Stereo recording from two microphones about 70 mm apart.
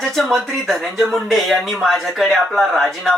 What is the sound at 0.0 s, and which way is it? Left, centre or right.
Speech, centre.